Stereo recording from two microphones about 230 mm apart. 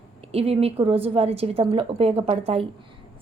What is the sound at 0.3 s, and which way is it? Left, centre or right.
A woman's voice, right.